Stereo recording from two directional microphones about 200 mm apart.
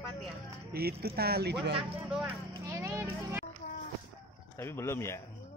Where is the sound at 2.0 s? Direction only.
5° right (ahead or behind).